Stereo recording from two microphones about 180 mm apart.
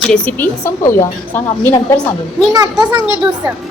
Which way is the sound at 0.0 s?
5° left (ahead or behind).